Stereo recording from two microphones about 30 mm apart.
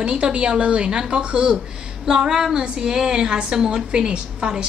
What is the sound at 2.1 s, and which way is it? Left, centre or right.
A woman's voice, right.